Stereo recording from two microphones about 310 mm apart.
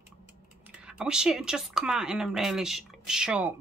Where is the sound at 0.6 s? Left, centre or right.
Centre.